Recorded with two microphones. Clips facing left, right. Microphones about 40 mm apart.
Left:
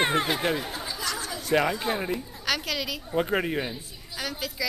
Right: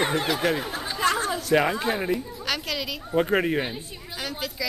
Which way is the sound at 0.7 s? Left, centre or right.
Right.